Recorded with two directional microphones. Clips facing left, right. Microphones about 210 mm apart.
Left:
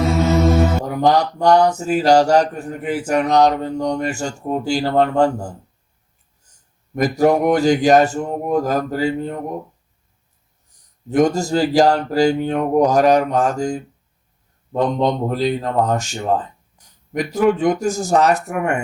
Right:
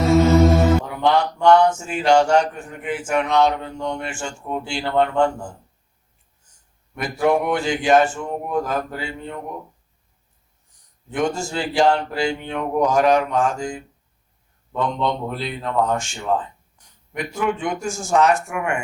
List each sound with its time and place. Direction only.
0.9 s speech: 40° left (ahead or behind)
6.9 s speech: 40° left (ahead or behind)
11.1 s speech: 40° left (ahead or behind)